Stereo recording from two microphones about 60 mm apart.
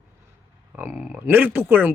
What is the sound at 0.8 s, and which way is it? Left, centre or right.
Speech, right.